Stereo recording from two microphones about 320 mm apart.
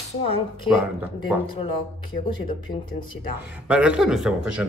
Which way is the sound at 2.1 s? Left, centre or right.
Left.